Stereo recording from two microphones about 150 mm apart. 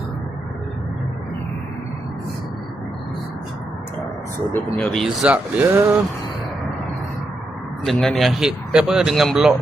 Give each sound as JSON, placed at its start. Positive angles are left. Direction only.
{"t": 4.5, "sound": "speech", "side_deg": 5}
{"t": 5.7, "sound": "speech", "side_deg": -20}
{"t": 7.9, "sound": "speech", "side_deg": 5}